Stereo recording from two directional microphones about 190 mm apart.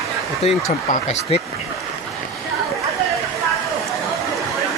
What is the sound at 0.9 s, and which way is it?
Speech, 35° left (ahead or behind).